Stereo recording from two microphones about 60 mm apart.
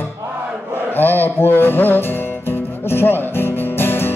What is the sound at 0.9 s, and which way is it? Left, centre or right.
Music, left.